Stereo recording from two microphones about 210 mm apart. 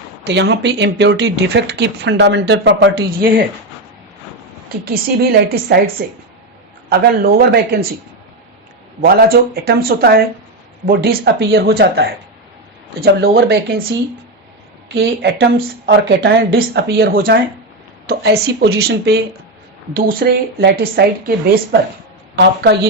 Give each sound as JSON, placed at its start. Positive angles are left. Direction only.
{"t": 0.3, "sound": "speech", "side_deg": -55}
{"t": 5.6, "sound": "a woman's voice", "side_deg": -45}
{"t": 6.9, "sound": "a woman's voice", "side_deg": -45}
{"t": 9.0, "sound": "a woman's voice", "side_deg": -45}
{"t": 14.8, "sound": "a woman's voice", "side_deg": -50}